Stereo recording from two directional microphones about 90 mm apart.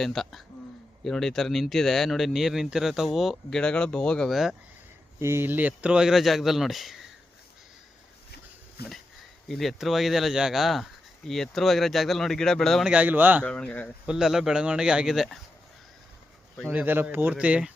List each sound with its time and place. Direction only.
0.0 s speech: 5° left (ahead or behind)
3.5 s speech: 10° left (ahead or behind)
5.2 s speech: 25° right (ahead or behind); by 7.0 s centre (ahead or behind)
9.5 s speech: centre (ahead or behind)
12.8 s speech: 15° right (ahead or behind)
13.4 s speech: 10° left (ahead or behind)
14.1 s speech: 5° right (ahead or behind)
16.6 s speech: 25° right (ahead or behind)